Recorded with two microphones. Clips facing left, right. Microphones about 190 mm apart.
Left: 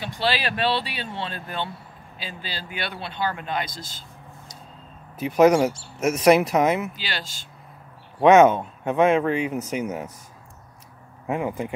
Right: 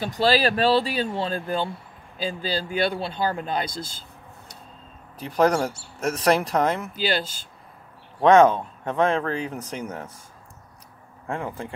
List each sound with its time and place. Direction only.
0.0 s speech: 40° right (ahead or behind)
5.1 s speech: 10° left (ahead or behind)
8.2 s speech: 5° left (ahead or behind)
11.2 s speech: 10° left (ahead or behind)